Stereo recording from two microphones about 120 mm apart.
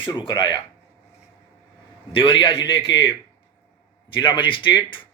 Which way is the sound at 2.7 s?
45° left (ahead or behind).